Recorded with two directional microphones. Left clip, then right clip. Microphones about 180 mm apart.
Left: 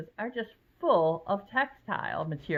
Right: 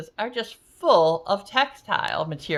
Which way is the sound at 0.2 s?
20° right (ahead or behind).